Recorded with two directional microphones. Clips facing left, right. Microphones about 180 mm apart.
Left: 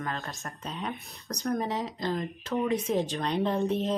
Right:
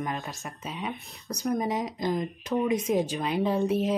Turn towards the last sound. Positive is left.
turn(degrees=-5)  # may be behind; listen again after turning